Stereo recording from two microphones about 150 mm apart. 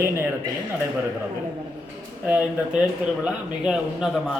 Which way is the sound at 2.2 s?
10° right (ahead or behind).